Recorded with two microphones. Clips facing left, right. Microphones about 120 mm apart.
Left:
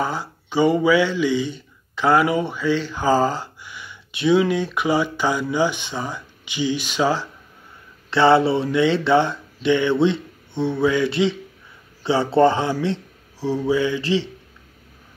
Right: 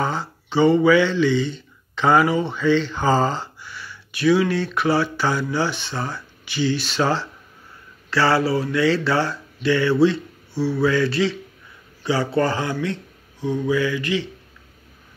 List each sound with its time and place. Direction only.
0.0 s speech: 10° left (ahead or behind)
8.1 s speech: 25° left (ahead or behind)